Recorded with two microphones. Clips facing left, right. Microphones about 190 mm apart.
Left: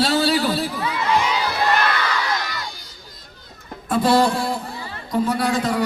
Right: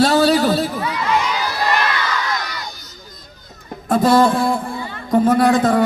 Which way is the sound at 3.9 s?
45° right (ahead or behind).